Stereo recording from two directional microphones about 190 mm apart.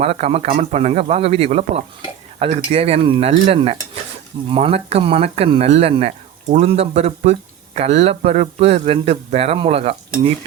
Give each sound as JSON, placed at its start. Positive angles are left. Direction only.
{"t": 0.0, "sound": "speech", "side_deg": -35}